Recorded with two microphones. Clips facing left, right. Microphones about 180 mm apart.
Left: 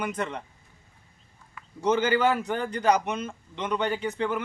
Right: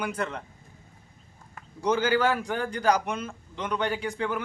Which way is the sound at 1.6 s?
45° right (ahead or behind).